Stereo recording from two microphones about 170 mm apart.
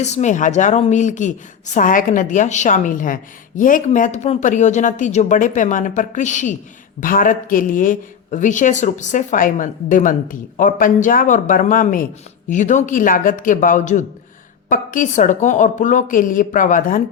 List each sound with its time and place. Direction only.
0.0 s speech: 45° left (ahead or behind)